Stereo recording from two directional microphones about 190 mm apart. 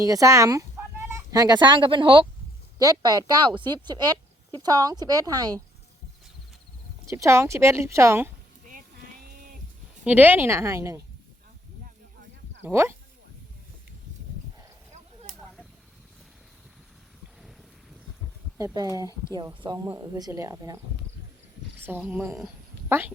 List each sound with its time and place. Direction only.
0.0 s a woman's voice: 15° right (ahead or behind)
7.1 s speech: 15° right (ahead or behind)
10.0 s speech: 10° right (ahead or behind)
12.6 s speech: 15° right (ahead or behind)
14.9 s a sound: 35° right (ahead or behind)
18.5 s a woman's voice: 20° right (ahead or behind)
21.8 s speech: 10° right (ahead or behind)